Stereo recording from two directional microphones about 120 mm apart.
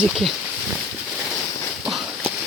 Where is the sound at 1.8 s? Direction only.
5° right (ahead or behind).